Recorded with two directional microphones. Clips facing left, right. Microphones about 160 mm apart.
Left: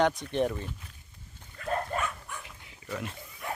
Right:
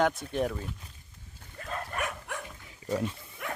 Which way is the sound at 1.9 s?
80° right.